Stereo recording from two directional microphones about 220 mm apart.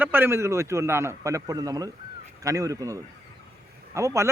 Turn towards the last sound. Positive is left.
turn(degrees=-15)  # may be behind; listen again after turning